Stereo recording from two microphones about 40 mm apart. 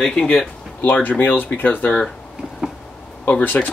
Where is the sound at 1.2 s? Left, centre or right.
Left.